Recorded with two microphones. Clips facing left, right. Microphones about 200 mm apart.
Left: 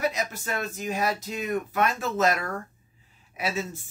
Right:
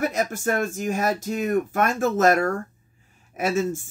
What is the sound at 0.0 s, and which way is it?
Speech, 50° right (ahead or behind).